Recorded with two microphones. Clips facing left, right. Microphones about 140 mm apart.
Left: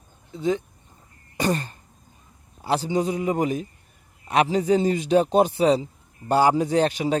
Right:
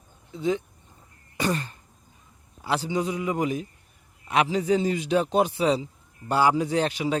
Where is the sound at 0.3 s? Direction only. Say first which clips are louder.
Left 2 dB; 40° left (ahead or behind).